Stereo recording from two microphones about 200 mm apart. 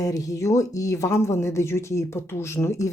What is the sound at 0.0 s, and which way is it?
Speech, 15° left (ahead or behind).